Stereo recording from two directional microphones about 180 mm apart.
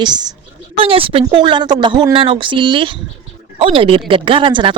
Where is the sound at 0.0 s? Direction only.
25° right (ahead or behind).